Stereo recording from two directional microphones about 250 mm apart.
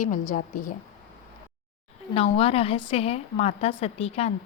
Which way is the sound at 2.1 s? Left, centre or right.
Left.